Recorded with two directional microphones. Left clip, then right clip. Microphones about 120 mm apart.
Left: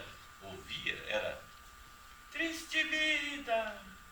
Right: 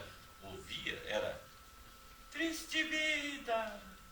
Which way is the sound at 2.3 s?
25° right (ahead or behind).